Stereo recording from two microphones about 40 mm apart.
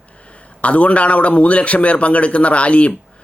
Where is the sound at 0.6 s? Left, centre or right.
Left.